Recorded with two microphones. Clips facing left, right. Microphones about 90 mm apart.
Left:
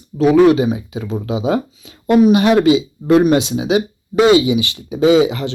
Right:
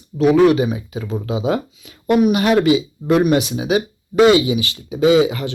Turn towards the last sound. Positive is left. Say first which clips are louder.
# left 2 dB
turn(degrees=25)  # may be behind; listen again after turning